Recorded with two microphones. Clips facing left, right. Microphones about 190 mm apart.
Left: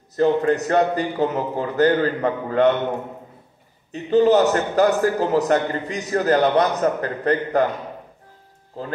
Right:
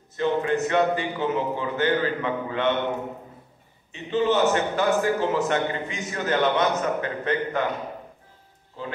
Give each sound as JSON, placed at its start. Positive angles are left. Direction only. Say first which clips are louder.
{"t": 0.1, "sound": "a man's voice", "louder": "left 5 dB", "side_deg": 40}
{"t": 3.9, "sound": "a man's voice", "louder": "left 7 dB", "side_deg": 40}